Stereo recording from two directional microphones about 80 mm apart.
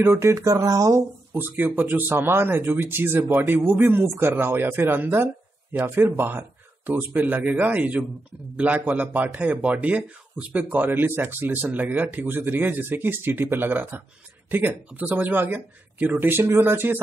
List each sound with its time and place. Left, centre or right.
0.0 s speech: right
1.3 s speech: right